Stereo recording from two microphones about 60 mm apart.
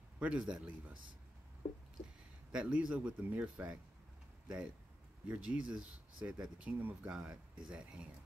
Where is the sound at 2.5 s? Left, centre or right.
Centre.